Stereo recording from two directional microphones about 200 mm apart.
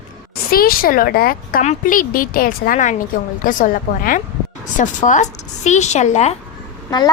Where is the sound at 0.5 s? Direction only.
45° left (ahead or behind).